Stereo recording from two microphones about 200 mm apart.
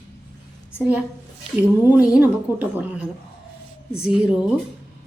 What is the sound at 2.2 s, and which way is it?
Speech, 10° right (ahead or behind).